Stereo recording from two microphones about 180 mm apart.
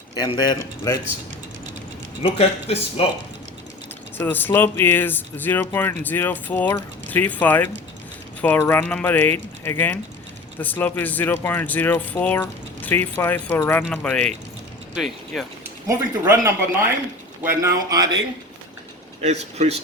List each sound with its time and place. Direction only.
0.1 s speech: 25° left (ahead or behind)
2.2 s speech: 30° left (ahead or behind)
4.3 s speech: 10° left (ahead or behind)
15.9 s speech: 15° right (ahead or behind)
17.6 s speech: 20° right (ahead or behind)
19.2 s a man's voice: 40° right (ahead or behind)